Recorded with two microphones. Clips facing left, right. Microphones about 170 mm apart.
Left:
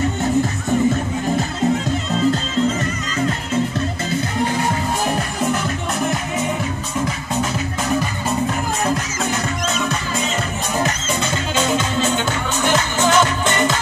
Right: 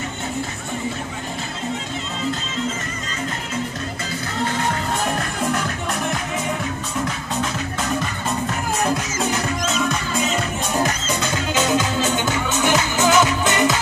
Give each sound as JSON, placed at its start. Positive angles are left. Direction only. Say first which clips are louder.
{"t": 5.1, "sound": "music", "louder": "left 2 dB", "side_deg": 5}
{"t": 8.8, "sound": "music", "louder": "right 1 dB", "side_deg": -5}
{"t": 11.5, "sound": "music", "louder": "even", "side_deg": -5}